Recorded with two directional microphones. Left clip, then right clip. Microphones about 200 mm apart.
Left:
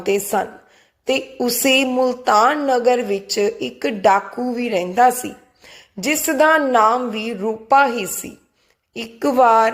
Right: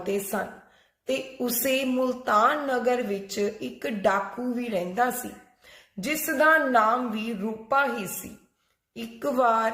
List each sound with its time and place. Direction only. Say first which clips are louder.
0.0 s a woman's voice: left 10 dB; 35° left (ahead or behind)